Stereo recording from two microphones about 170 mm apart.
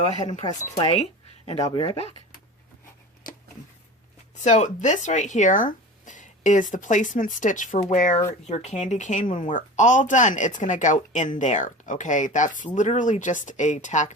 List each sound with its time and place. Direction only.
0.0 s speech: 40° left (ahead or behind)
4.4 s speech: 45° left (ahead or behind)